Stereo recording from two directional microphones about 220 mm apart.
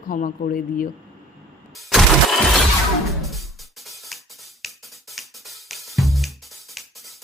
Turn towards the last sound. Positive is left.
turn(degrees=0)  # may be behind; listen again after turning